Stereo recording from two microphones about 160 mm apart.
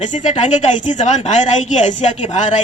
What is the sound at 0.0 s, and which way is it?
A woman's voice, 50° left (ahead or behind).